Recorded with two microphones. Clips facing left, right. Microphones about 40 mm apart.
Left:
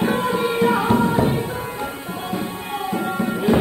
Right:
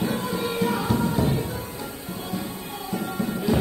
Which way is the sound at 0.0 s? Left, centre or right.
Left.